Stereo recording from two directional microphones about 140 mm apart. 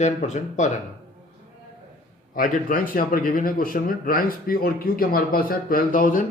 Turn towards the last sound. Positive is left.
turn(degrees=80)